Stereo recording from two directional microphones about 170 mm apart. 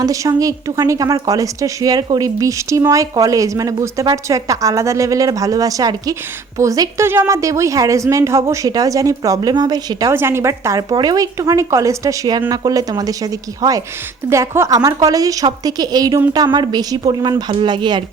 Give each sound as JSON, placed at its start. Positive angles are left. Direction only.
{"t": 0.0, "sound": "a woman's voice", "side_deg": -20}